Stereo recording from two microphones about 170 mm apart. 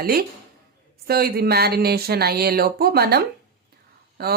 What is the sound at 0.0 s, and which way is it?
Speech, 65° right (ahead or behind).